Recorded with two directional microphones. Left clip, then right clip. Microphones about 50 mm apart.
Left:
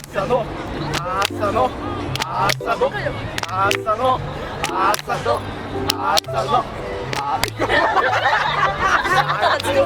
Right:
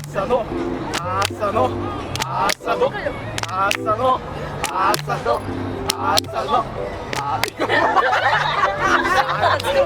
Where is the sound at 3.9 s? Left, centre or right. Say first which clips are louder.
Right 2 dB; centre.